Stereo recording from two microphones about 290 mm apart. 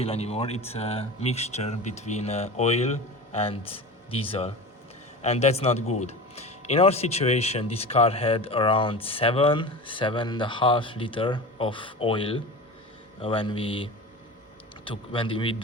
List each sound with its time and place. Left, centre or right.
0.0 s speech: left
14.8 s speech: centre